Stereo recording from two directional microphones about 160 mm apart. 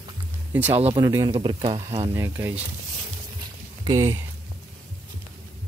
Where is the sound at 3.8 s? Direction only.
20° right (ahead or behind).